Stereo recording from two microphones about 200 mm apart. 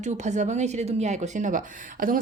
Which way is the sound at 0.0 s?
35° right (ahead or behind).